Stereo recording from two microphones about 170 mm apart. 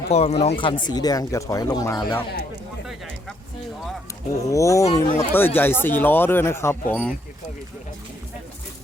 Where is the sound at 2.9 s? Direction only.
Centre (ahead or behind).